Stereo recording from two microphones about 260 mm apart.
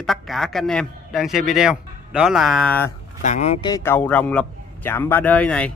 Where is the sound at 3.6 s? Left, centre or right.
Centre.